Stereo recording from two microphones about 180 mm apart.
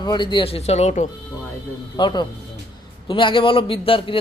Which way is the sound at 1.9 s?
25° left (ahead or behind).